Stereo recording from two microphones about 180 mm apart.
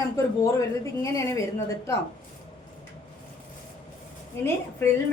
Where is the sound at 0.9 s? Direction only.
15° left (ahead or behind).